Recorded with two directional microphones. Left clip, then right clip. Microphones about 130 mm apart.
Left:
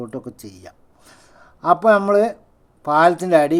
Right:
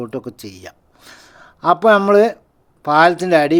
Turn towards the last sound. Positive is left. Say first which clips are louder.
# right 1 dB
turn(degrees=-15)  # may be behind; listen again after turning